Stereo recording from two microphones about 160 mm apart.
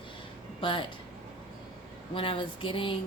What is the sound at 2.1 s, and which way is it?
Speech, 30° left (ahead or behind).